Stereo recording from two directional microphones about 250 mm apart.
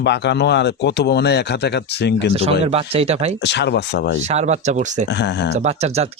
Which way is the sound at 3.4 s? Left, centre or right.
Left.